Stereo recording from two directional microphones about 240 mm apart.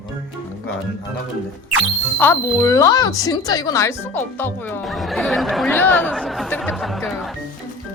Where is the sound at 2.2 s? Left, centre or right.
Centre.